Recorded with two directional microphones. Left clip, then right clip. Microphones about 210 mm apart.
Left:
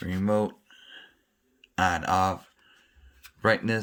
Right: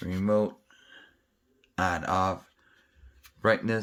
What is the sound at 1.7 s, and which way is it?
Speech, 15° left (ahead or behind).